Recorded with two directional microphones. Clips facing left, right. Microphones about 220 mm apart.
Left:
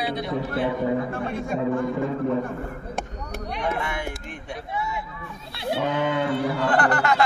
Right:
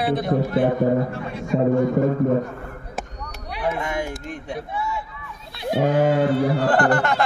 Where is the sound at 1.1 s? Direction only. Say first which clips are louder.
Left 2 dB; 50° left (ahead or behind).